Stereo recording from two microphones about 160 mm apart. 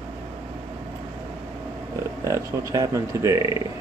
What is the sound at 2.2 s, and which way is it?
Speech, 20° right (ahead or behind).